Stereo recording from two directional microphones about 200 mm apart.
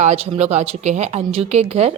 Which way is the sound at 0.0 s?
30° right (ahead or behind).